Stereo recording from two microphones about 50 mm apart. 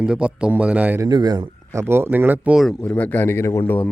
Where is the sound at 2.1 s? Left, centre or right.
Right.